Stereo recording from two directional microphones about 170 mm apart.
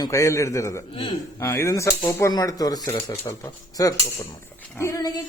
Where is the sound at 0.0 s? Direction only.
15° left (ahead or behind).